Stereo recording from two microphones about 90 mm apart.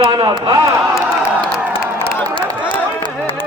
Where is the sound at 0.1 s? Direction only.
90° right.